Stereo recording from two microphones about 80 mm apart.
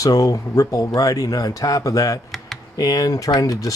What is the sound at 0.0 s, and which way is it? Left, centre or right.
Speech, left.